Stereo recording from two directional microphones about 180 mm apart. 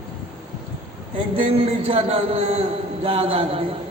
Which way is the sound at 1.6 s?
30° right (ahead or behind).